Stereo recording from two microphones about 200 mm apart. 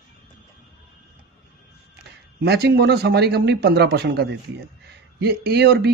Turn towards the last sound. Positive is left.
turn(degrees=-55)  # may be behind; listen again after turning